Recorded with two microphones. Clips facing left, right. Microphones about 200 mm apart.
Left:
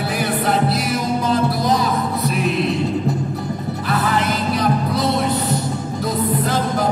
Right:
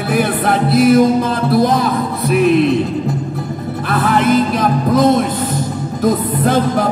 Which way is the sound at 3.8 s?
55° right (ahead or behind).